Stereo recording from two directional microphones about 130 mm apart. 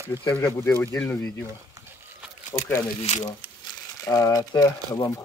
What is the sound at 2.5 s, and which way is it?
Speech, 25° left (ahead or behind).